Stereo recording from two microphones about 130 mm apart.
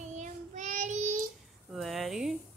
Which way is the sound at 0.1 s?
70° right (ahead or behind).